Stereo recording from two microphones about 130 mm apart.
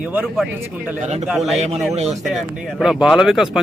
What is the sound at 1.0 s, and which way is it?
Speech, 60° right (ahead or behind).